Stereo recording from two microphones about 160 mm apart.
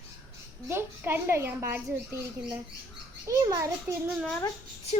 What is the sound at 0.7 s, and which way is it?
A child's voice, 15° right (ahead or behind).